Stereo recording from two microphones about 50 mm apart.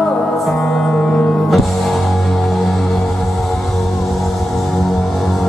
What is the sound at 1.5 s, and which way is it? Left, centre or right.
Music, centre.